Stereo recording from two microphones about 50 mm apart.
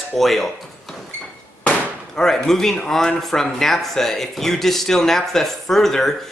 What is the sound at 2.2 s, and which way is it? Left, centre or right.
A man's voice, centre.